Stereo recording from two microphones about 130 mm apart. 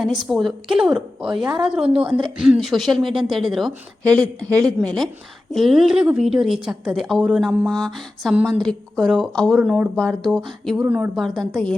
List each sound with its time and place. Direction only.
0.2 s a woman's voice: centre (ahead or behind)
1.5 s a woman's voice: 40° right (ahead or behind)
2.4 s a woman's voice: 5° right (ahead or behind)
10.8 s a woman's voice: 15° right (ahead or behind)
11.1 s a woman's voice: 5° right (ahead or behind)